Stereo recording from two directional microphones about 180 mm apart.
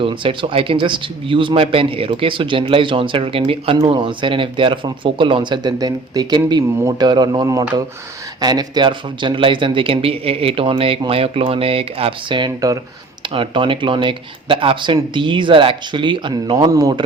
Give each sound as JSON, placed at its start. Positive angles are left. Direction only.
{"t": 0.0, "sound": "speech", "side_deg": -30}